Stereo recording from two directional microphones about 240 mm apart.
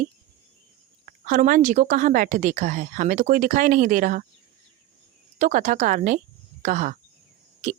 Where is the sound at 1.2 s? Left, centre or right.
Right.